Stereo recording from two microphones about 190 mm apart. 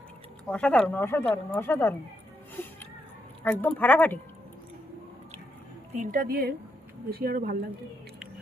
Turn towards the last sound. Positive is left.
turn(degrees=-50)  # may be behind; listen again after turning